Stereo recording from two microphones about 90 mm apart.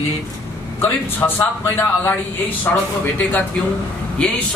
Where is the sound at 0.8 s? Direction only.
25° left (ahead or behind).